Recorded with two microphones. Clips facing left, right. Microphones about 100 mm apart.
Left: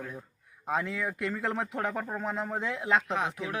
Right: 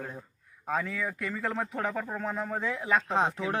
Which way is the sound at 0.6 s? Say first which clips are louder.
Even; 15° left (ahead or behind).